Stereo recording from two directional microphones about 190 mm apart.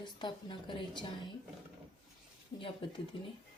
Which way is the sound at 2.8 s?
25° left (ahead or behind).